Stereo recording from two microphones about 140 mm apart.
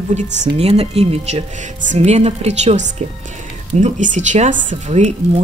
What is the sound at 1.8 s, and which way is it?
Speech, 55° right (ahead or behind).